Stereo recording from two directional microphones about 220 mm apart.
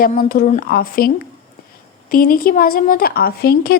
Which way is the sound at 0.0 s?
40° left (ahead or behind).